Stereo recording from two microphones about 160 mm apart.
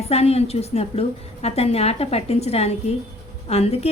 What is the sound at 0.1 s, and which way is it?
A woman's voice, 40° left (ahead or behind).